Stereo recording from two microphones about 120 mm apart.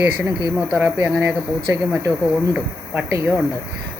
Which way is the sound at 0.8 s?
15° right (ahead or behind).